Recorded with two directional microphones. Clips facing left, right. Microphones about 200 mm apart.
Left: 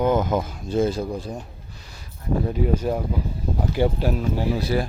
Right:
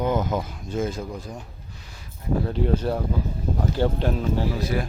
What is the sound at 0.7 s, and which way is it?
Speech, 35° left (ahead or behind).